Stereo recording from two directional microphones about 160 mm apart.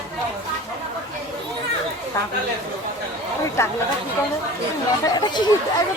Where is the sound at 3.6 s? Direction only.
15° left (ahead or behind).